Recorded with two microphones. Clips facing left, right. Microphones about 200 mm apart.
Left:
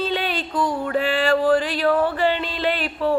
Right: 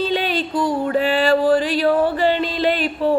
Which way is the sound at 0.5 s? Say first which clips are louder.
Right 2 dB; 40° right (ahead or behind).